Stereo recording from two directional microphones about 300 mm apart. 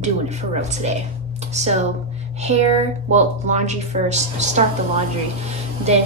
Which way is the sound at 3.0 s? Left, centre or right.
Right.